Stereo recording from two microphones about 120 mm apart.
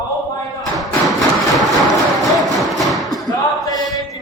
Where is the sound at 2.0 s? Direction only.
Centre (ahead or behind).